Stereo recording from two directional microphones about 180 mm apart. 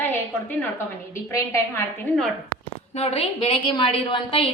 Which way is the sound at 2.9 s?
35° left (ahead or behind).